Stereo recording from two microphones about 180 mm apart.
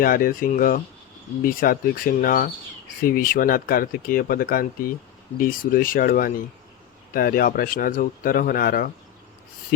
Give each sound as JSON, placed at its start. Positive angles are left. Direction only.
{"t": 0.0, "sound": "speech", "side_deg": 50}